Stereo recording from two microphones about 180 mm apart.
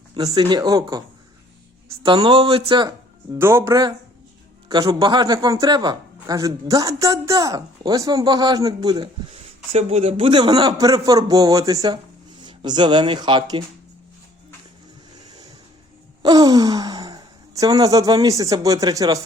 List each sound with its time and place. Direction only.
0.1 s speech: 20° right (ahead or behind)
2.0 s speech: 30° right (ahead or behind)
3.3 s speech: 15° right (ahead or behind)
9.7 s speech: 35° right (ahead or behind)
16.2 s speech: 20° right (ahead or behind)